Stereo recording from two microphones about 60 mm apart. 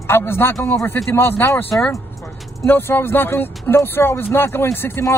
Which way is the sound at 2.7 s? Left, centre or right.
Left.